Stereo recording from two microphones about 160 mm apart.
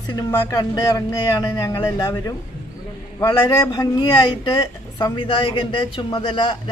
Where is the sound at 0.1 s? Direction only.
25° left (ahead or behind).